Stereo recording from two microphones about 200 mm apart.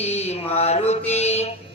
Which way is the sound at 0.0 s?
35° left (ahead or behind).